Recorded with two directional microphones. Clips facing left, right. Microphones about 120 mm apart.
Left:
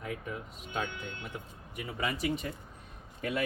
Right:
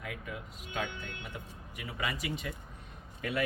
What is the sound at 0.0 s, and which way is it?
Speech, 35° left (ahead or behind).